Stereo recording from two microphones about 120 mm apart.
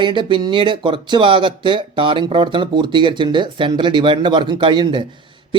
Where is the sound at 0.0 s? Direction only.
40° right (ahead or behind).